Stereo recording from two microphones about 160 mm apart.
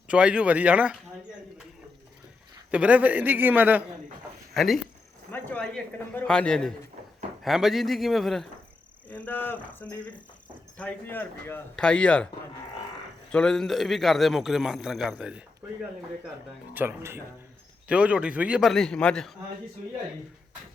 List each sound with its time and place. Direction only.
0.1 s a sound: 5° right (ahead or behind)
2.6 s a man's voice: 10° right (ahead or behind)
4.5 s a man's voice: centre (ahead or behind)
13.3 s a man's voice: 5° left (ahead or behind)